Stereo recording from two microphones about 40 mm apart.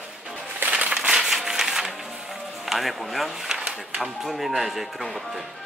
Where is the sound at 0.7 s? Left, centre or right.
Right.